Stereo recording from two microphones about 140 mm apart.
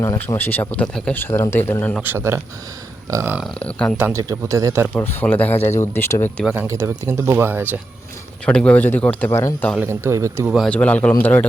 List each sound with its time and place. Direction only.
0.0 s speech: 20° left (ahead or behind)
2.0 s speech: 15° right (ahead or behind)
3.6 s speech: 10° left (ahead or behind)
3.9 s speech: 15° right (ahead or behind)
4.9 s speech: 10° left (ahead or behind)
5.5 s speech: 50° left (ahead or behind)
5.8 s speech: 15° left (ahead or behind)
6.5 s speech: 15° right (ahead or behind)
8.4 s speech: 10° left (ahead or behind)
9.8 s speech: 20° right (ahead or behind)
10.7 s speech: 10° left (ahead or behind)